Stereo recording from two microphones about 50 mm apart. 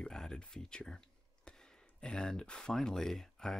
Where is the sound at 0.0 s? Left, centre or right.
Centre.